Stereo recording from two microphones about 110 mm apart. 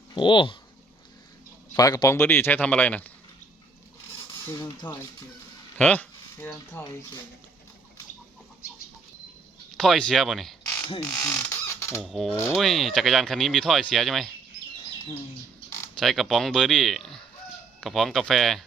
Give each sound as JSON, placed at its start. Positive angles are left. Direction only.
{"t": 0.1, "sound": "speech", "side_deg": 45}
{"t": 1.7, "sound": "speech", "side_deg": 35}
{"t": 4.8, "sound": "speech", "side_deg": 15}
{"t": 5.7, "sound": "a sound", "side_deg": 15}
{"t": 9.7, "sound": "speech", "side_deg": 0}
{"t": 11.0, "sound": "speech", "side_deg": 30}
{"t": 12.0, "sound": "speech", "side_deg": 0}
{"t": 16.0, "sound": "speech", "side_deg": 0}